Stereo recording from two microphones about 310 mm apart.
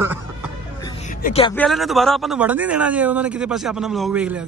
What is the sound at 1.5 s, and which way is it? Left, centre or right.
Speech, centre.